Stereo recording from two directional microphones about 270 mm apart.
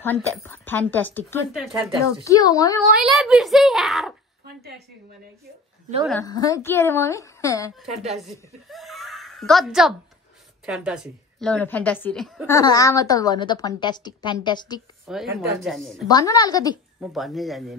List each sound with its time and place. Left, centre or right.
0.0 s a woman's voice: centre
3.0 s a woman's voice: centre
4.6 s a sound: right
6.2 s a woman's voice: centre
7.9 s a woman's voice: right
8.2 s a sound: centre
10.6 s a woman's voice: centre
12.5 s a woman's voice: centre
15.0 s a woman's voice: centre
16.1 s a woman's voice: centre
17.0 s a woman's voice: centre